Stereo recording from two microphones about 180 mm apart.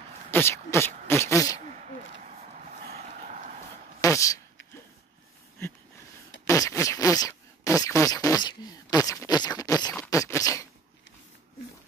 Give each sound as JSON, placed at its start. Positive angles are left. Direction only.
{"t": 0.3, "sound": "speech", "side_deg": 15}
{"t": 4.0, "sound": "a sound", "side_deg": 15}
{"t": 6.4, "sound": "speech", "side_deg": 15}
{"t": 10.0, "sound": "beatboxing", "side_deg": 15}